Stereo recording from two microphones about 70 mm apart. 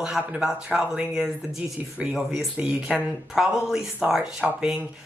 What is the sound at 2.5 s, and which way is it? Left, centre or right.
Speech, centre.